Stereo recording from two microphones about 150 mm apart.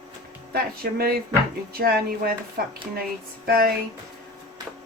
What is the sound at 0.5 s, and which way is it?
Speech, 90° right.